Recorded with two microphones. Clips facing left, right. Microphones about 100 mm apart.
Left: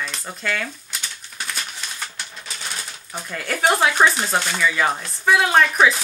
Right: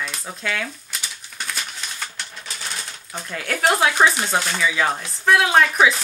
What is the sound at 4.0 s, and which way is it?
Speech, centre (ahead or behind).